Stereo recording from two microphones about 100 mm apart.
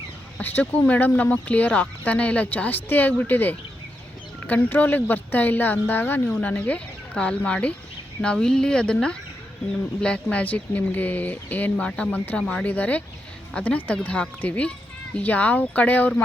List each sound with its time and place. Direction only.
0.3 s speech: 15° left (ahead or behind)
12.4 s speech: 5° left (ahead or behind)